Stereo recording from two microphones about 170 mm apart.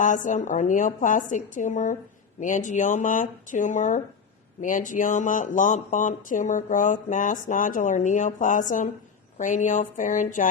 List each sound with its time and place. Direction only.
0.0 s speech: 50° left (ahead or behind)